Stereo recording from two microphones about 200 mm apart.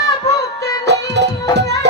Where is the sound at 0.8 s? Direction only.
60° right (ahead or behind).